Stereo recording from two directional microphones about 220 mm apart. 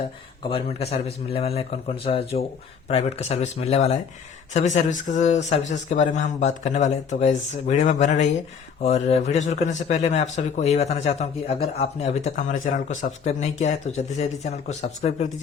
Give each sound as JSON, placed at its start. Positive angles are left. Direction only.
{"t": 0.4, "sound": "a man's voice", "side_deg": 25}